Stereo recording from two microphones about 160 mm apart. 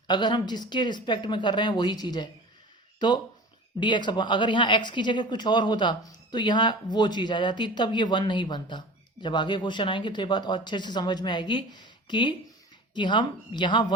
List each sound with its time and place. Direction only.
0.1 s speech: 25° left (ahead or behind)